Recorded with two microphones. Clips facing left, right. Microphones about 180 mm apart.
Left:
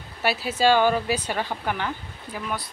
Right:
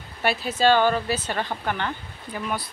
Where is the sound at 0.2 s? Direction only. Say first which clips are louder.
Even; 5° left (ahead or behind).